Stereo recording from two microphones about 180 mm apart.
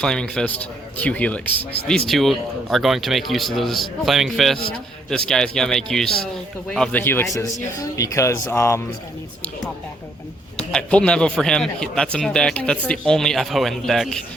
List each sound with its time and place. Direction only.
0.0 s a man's voice: 5° left (ahead or behind)
10.7 s a man's voice: 5° left (ahead or behind)